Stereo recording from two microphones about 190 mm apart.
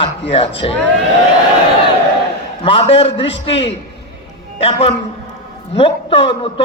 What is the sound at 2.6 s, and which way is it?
A man's voice, 30° left (ahead or behind).